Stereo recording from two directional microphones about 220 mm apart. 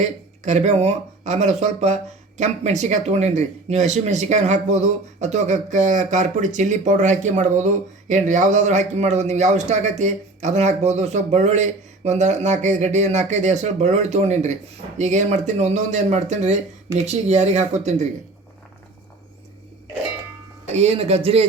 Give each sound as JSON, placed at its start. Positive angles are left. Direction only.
{"t": 0.4, "sound": "speech", "side_deg": -30}
{"t": 20.7, "sound": "speech", "side_deg": -25}